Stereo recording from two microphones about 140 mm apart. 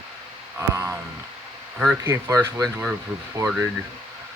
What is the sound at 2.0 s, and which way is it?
Speech, 20° right (ahead or behind).